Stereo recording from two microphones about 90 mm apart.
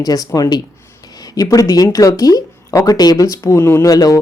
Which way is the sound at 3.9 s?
45° left (ahead or behind).